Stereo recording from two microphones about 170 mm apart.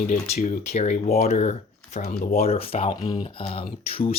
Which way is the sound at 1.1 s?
60° left (ahead or behind).